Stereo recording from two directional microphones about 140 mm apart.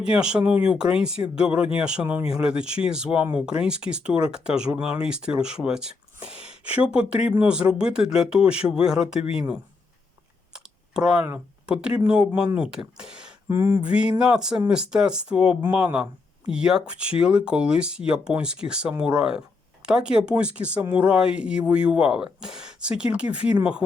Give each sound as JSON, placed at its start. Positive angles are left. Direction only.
{"t": 0.0, "sound": "speech", "side_deg": -5}
{"t": 10.5, "sound": "clicking", "side_deg": -5}
{"t": 11.6, "sound": "speech", "side_deg": -5}
{"t": 13.0, "sound": "a sound", "side_deg": -5}
{"t": 13.5, "sound": "a sound", "side_deg": -20}
{"t": 13.8, "sound": "speech", "side_deg": -10}